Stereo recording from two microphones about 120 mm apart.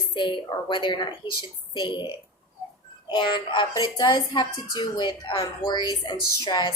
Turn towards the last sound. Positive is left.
turn(degrees=35)  # may be behind; listen again after turning